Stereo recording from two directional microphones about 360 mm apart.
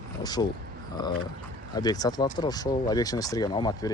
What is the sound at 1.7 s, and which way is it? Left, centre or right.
Speech, centre.